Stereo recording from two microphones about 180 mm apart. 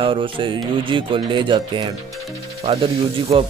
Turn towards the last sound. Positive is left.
turn(degrees=-30)  # may be behind; listen again after turning